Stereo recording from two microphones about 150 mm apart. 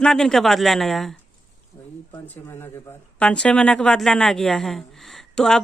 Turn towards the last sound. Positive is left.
turn(degrees=5)  # may be behind; listen again after turning